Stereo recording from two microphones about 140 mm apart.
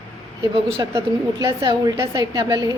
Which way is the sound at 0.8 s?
25° right (ahead or behind).